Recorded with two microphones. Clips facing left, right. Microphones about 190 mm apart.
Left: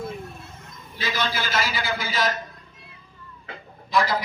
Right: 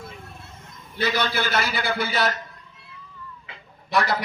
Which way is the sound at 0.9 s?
65° right (ahead or behind).